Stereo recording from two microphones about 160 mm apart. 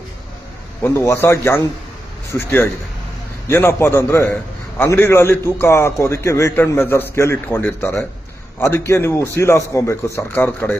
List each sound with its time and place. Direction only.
0.8 s a man's voice: 15° left (ahead or behind)